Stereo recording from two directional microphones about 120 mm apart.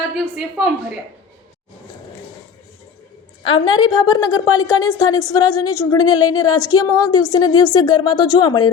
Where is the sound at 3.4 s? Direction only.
45° left (ahead or behind).